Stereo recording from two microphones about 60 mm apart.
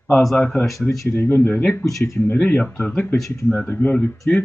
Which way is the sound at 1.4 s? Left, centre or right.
Left.